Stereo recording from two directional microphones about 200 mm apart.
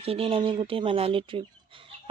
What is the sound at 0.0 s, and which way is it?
Speech, 30° right (ahead or behind).